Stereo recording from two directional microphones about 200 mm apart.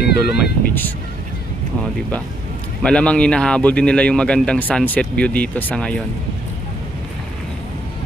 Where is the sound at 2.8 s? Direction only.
5° left (ahead or behind).